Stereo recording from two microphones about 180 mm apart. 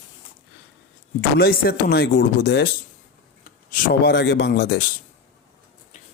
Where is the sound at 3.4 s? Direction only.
50° left (ahead or behind).